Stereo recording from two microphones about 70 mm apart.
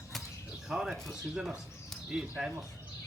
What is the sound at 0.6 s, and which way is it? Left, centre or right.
Speech, centre.